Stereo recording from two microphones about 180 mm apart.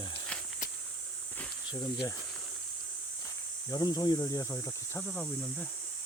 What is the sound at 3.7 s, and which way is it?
Speech, 20° left (ahead or behind).